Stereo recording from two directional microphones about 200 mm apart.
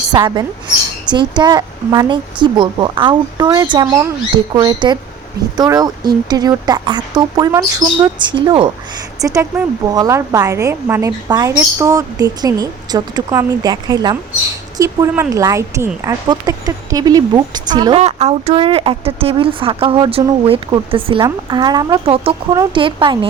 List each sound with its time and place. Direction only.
0.1 s speech: 20° right (ahead or behind)
9.2 s a woman's voice: 15° right (ahead or behind)
18.0 s speech: 35° right (ahead or behind)